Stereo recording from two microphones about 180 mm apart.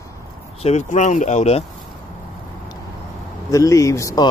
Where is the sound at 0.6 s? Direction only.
40° left (ahead or behind).